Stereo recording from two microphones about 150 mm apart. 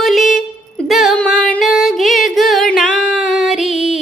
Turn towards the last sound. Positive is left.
turn(degrees=0)  # may be behind; listen again after turning